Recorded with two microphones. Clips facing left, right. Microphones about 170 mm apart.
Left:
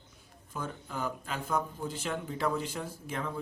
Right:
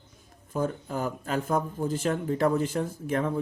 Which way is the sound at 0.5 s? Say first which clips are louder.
Right 9 dB; 45° right (ahead or behind).